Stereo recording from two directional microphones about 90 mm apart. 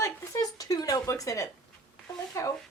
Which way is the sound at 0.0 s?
40° left (ahead or behind).